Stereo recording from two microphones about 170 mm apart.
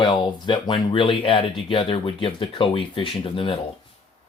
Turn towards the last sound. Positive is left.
turn(degrees=30)  # may be behind; listen again after turning